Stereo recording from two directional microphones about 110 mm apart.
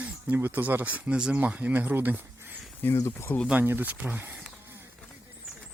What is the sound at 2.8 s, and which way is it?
Speech, 25° left (ahead or behind).